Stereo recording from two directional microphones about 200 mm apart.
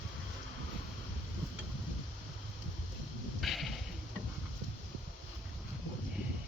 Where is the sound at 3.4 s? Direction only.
Centre (ahead or behind).